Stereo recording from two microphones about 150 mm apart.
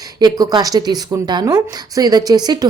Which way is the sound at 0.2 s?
25° right (ahead or behind).